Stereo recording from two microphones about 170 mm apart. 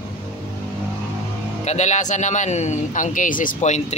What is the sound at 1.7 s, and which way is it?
Speech, 45° left (ahead or behind).